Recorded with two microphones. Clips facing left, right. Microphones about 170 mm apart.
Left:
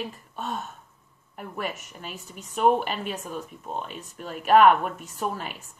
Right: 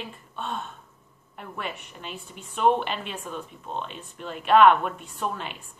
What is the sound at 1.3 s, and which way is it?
Speech, 45° left (ahead or behind).